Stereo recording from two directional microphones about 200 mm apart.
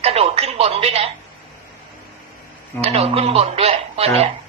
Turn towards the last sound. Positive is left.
turn(degrees=-30)  # may be behind; listen again after turning